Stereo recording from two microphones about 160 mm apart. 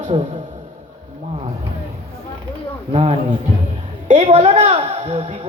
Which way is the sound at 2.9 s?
40° right (ahead or behind).